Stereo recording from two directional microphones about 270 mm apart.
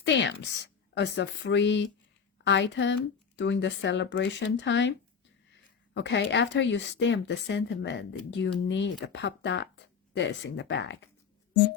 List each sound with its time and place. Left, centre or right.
0.0 s a woman's voice: left